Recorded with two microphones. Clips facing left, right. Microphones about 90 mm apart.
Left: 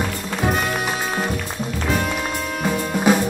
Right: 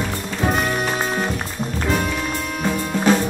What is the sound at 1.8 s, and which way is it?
Music, centre (ahead or behind).